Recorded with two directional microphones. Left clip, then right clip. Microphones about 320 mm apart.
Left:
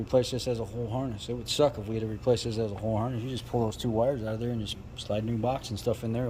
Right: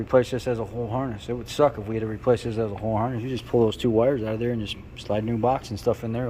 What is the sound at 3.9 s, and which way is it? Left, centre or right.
Speech, centre.